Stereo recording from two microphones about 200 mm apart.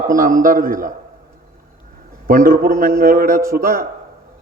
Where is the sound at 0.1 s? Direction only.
40° right (ahead or behind).